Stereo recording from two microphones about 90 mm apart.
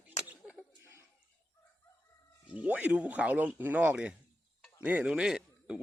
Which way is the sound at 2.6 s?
15° right (ahead or behind).